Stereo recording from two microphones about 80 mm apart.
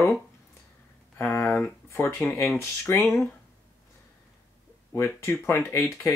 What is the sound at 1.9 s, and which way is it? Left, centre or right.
Speech, left.